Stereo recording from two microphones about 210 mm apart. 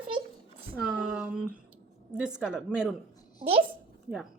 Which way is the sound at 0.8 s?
5° right (ahead or behind).